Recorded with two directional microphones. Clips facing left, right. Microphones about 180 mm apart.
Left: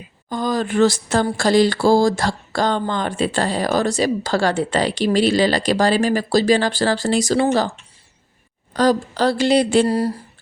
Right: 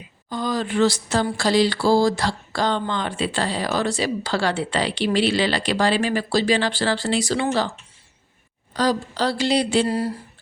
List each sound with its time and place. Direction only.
0.3 s speech: 45° left (ahead or behind)
8.7 s speech: 50° left (ahead or behind)